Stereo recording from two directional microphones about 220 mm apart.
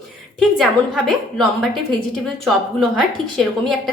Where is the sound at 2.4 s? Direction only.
Centre (ahead or behind).